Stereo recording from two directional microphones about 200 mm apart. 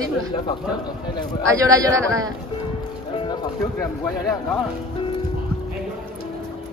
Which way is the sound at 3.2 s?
20° left (ahead or behind).